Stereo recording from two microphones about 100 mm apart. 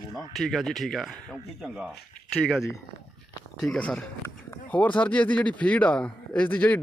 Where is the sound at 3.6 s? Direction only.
10° left (ahead or behind).